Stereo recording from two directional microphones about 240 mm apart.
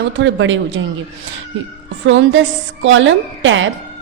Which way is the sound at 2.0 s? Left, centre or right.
Right.